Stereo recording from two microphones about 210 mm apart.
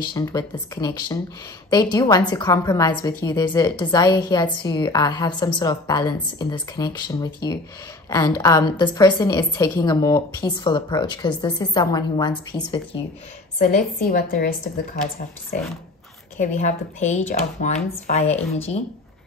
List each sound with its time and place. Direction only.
0.1 s a woman's voice: 20° left (ahead or behind)
13.6 s a woman's voice: 40° left (ahead or behind)
16.3 s a woman's voice: 35° left (ahead or behind)